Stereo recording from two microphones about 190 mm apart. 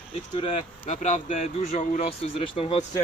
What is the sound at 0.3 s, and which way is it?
Speech, 30° left (ahead or behind).